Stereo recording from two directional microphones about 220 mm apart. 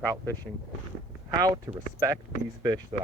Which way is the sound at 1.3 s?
15° right (ahead or behind).